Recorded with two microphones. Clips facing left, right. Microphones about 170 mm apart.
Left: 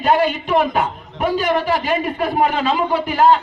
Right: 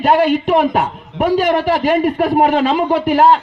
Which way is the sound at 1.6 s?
60° right (ahead or behind).